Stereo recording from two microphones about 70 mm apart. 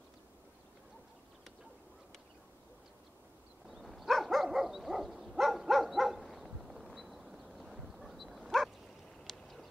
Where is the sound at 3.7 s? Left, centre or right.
Centre.